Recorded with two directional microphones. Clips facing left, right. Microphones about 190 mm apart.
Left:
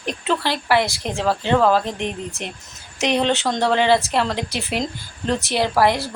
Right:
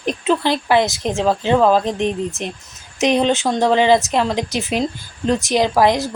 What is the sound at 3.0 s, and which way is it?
A woman's voice, 20° right (ahead or behind).